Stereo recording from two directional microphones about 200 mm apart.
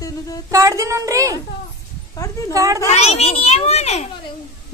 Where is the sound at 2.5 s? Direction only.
15° right (ahead or behind).